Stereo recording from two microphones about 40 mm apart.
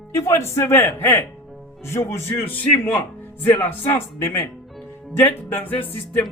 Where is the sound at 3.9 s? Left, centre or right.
Left.